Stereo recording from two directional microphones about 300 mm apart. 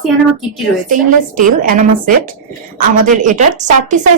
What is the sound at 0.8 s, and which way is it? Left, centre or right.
A woman's voice, right.